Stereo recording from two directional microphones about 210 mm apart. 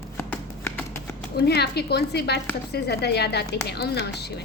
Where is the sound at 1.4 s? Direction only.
50° left (ahead or behind).